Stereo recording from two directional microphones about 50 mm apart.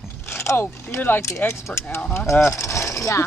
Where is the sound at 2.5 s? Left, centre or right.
Left.